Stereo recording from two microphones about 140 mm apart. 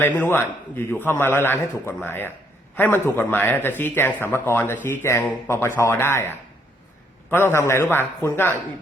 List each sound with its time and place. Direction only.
0.0 s speech: 15° left (ahead or behind)